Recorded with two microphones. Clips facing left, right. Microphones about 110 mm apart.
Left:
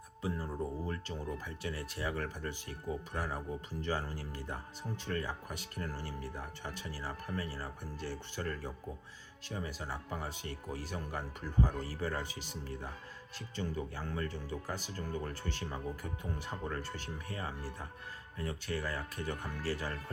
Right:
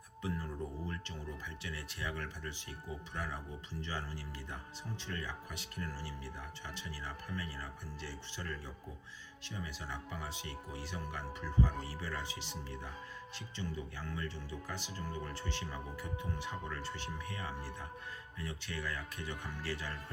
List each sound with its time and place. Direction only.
0.2 s speech: 30° left (ahead or behind)